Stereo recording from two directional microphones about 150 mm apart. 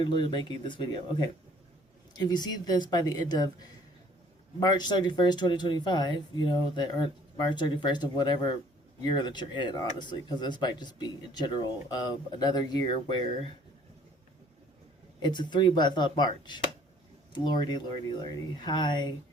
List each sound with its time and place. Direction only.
0.0 s speech: 30° left (ahead or behind)
15.2 s speech: 30° left (ahead or behind)